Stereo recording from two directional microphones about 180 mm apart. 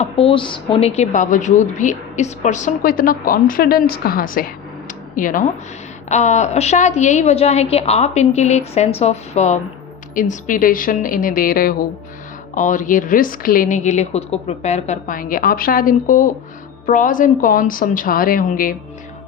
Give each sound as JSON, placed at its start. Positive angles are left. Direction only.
{"t": 0.0, "sound": "a woman's voice", "side_deg": 30}